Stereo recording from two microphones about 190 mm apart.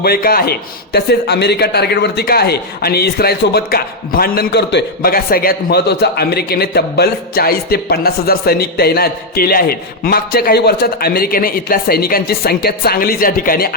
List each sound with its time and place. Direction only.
0.0 s a man's voice: 50° left (ahead or behind)